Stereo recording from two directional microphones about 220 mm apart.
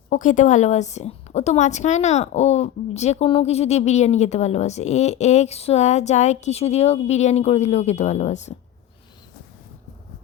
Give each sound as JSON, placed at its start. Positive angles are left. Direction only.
{"t": 0.1, "sound": "a woman's voice", "side_deg": 35}